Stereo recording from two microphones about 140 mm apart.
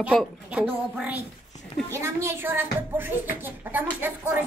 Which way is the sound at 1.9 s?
20° right (ahead or behind).